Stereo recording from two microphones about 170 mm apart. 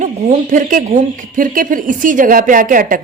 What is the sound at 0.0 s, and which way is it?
A woman's voice, 45° right (ahead or behind).